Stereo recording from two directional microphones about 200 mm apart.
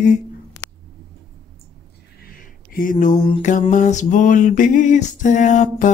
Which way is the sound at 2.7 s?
40° left (ahead or behind).